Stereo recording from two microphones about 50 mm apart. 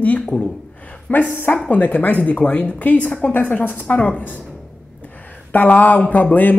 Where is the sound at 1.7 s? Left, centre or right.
Left.